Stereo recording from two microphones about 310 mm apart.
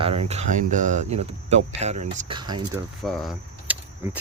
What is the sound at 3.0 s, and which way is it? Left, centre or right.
Speech, centre.